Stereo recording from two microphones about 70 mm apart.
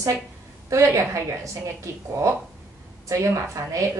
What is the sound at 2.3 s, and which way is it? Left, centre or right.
A woman's voice, right.